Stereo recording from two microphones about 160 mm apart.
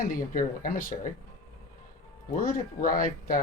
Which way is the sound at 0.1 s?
60° left (ahead or behind).